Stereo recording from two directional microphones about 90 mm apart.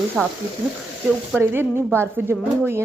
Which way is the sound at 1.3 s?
20° right (ahead or behind).